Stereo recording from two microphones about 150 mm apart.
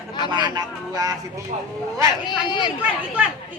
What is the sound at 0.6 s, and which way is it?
Speech, 25° right (ahead or behind).